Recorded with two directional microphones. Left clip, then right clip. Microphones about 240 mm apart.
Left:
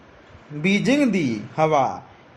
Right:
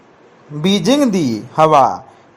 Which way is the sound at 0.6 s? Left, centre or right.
Centre.